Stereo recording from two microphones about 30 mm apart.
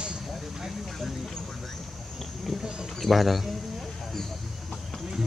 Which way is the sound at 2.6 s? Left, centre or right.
Right.